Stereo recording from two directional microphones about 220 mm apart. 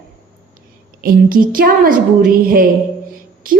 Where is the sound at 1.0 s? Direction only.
40° right (ahead or behind).